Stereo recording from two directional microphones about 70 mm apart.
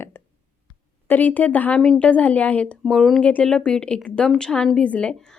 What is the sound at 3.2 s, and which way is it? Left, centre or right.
A woman's voice, centre.